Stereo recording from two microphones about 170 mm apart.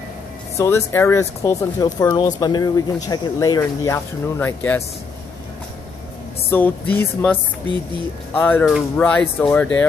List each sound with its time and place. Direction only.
0.6 s speech: 15° left (ahead or behind)
6.5 s speech: 10° left (ahead or behind)
8.4 s speech: 10° left (ahead or behind)
8.6 s speech: centre (ahead or behind)
9.0 s speech: 10° left (ahead or behind)